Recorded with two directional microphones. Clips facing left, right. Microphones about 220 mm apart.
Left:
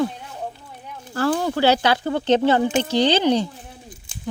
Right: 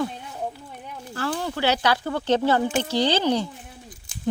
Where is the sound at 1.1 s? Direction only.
45° left (ahead or behind).